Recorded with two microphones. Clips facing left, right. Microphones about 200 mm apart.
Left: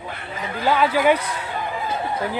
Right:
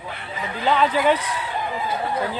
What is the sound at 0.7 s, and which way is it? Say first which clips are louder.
Speech: left 1 dB; 10° left (ahead or behind).